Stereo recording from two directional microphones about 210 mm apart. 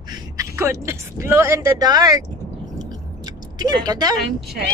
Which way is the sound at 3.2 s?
20° right (ahead or behind).